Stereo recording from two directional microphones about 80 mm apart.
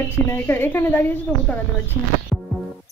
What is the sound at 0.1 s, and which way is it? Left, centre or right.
A woman's voice, left.